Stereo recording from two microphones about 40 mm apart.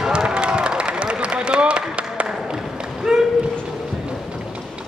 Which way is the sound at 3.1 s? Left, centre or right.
Centre.